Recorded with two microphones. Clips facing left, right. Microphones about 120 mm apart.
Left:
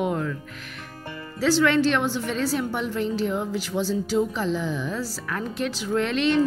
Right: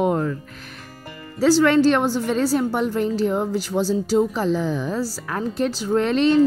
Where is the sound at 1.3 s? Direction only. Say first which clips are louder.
Right 5 dB; 35° right (ahead or behind).